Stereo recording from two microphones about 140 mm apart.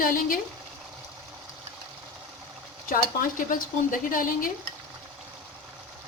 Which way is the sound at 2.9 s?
75° left (ahead or behind).